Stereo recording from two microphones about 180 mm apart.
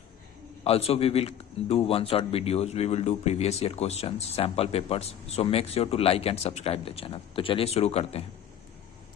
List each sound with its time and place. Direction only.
0.6 s a man's voice: 35° left (ahead or behind)